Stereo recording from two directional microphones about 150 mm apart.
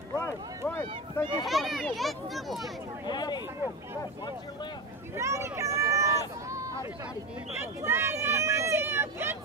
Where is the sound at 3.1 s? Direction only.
30° left (ahead or behind).